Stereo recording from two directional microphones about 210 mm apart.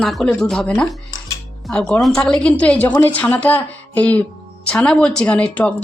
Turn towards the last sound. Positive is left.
turn(degrees=5)  # may be behind; listen again after turning